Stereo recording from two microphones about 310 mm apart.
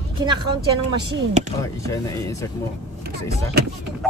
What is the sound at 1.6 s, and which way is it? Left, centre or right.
Speech, centre.